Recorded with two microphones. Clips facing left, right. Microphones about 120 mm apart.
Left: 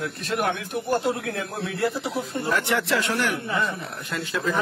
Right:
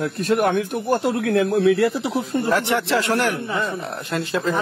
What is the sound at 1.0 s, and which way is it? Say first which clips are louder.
Speech: right 7 dB; 65° right (ahead or behind).